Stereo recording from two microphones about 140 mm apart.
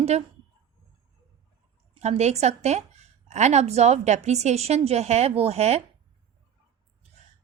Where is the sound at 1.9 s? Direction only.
50° right (ahead or behind).